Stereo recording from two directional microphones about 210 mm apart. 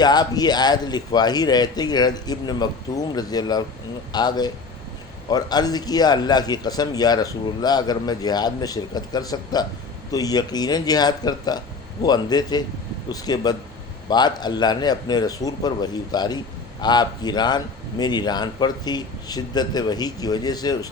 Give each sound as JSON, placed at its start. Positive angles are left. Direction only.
{"t": 0.0, "sound": "a man's voice", "side_deg": 20}